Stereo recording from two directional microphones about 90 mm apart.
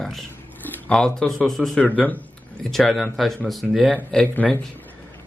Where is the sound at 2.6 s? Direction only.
Centre (ahead or behind).